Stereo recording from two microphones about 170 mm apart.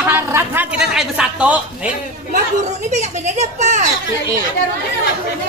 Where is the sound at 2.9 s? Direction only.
45° right (ahead or behind).